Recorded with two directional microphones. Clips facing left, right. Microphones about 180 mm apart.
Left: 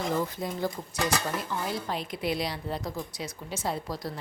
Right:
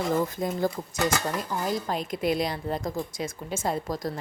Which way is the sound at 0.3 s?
45° right (ahead or behind).